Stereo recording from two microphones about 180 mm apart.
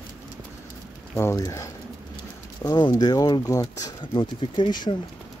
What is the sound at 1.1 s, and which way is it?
Speech, 15° left (ahead or behind).